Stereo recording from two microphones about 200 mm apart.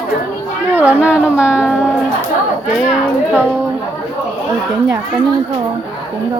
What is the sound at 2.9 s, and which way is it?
Speech, 10° right (ahead or behind).